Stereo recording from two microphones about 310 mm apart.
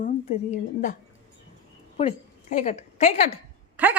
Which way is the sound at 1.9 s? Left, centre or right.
Centre.